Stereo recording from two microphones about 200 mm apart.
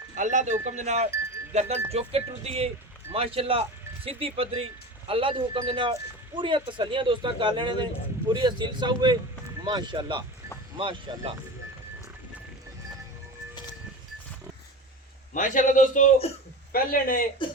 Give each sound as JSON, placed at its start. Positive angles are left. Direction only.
{"t": 0.2, "sound": "speech", "side_deg": -40}
{"t": 15.3, "sound": "a man's voice", "side_deg": 40}